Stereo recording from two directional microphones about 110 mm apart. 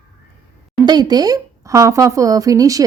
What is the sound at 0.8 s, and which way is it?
Speech, 40° right (ahead or behind).